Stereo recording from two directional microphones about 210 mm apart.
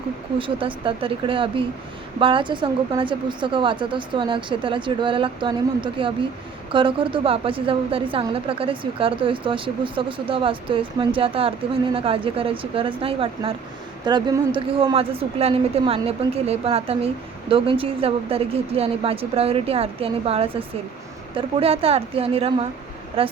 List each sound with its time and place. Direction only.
0.3 s a woman's voice: 25° right (ahead or behind)